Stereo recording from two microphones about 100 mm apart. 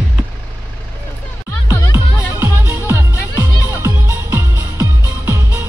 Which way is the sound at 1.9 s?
25° right (ahead or behind).